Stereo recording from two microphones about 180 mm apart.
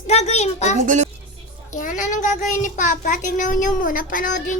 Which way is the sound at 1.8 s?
45° left (ahead or behind).